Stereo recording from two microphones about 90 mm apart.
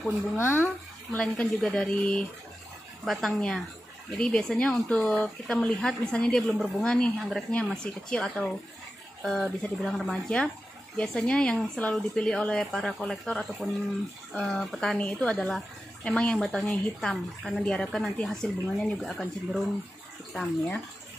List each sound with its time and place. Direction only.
0.4 s speech: 25° left (ahead or behind)
1.1 s speech: 10° left (ahead or behind)
16.3 s speech: centre (ahead or behind)